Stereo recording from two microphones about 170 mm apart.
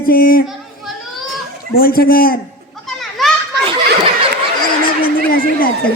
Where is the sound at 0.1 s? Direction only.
60° left (ahead or behind).